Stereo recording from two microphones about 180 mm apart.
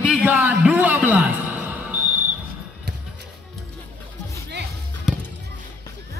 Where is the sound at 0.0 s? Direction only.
10° right (ahead or behind).